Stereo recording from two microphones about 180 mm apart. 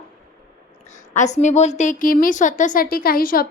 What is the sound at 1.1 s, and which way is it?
A woman's voice, 40° left (ahead or behind).